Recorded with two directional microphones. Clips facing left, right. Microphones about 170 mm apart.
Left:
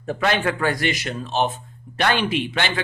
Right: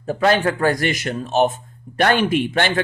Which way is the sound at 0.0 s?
35° right (ahead or behind).